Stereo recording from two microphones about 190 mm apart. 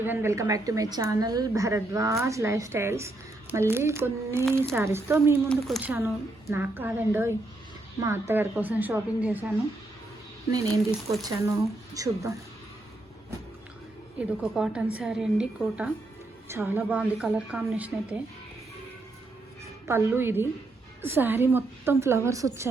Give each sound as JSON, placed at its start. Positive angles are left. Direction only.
{"t": 0.0, "sound": "a woman's voice", "side_deg": -10}
{"t": 5.5, "sound": "a woman's voice", "side_deg": 0}
{"t": 6.5, "sound": "a woman's voice", "side_deg": -10}
{"t": 10.5, "sound": "a woman's voice", "side_deg": -20}
{"t": 14.2, "sound": "a woman's voice", "side_deg": -5}
{"t": 19.9, "sound": "a woman's voice", "side_deg": -10}